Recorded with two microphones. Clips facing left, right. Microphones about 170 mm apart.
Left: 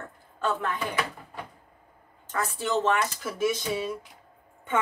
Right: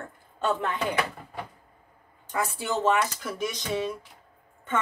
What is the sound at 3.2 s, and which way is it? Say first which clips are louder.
Speech: left 4 dB; 5° left (ahead or behind).